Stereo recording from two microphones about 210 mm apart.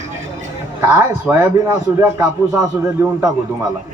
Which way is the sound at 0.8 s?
10° right (ahead or behind).